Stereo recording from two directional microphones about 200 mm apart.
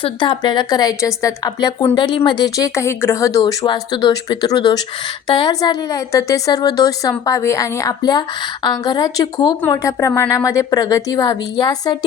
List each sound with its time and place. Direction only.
0.0 s a woman's voice: 25° left (ahead or behind)